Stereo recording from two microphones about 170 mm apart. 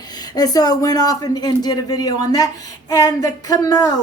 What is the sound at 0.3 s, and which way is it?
Female singing, 20° left (ahead or behind).